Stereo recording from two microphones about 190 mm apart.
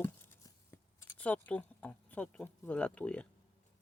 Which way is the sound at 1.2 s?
5° left (ahead or behind).